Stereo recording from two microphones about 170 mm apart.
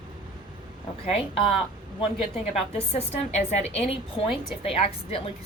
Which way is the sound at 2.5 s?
40° left (ahead or behind).